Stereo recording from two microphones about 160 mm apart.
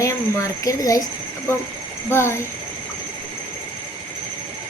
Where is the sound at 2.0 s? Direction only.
15° left (ahead or behind).